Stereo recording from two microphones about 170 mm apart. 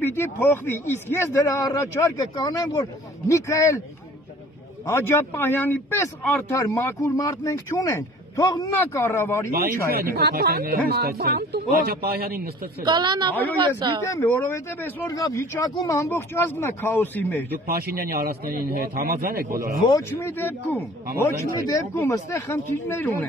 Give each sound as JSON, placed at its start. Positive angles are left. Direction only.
{"t": 0.0, "sound": "speech", "side_deg": 15}
{"t": 4.8, "sound": "speech", "side_deg": 15}
{"t": 9.8, "sound": "a man's voice", "side_deg": -65}
{"t": 12.8, "sound": "a woman's voice", "side_deg": -25}
{"t": 14.0, "sound": "speech", "side_deg": 15}
{"t": 15.0, "sound": "speech", "side_deg": 20}
{"t": 17.6, "sound": "a man's voice", "side_deg": -60}
{"t": 19.9, "sound": "speech", "side_deg": 15}